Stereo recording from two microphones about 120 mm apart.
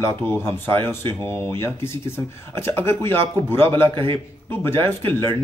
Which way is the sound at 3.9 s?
45° right (ahead or behind).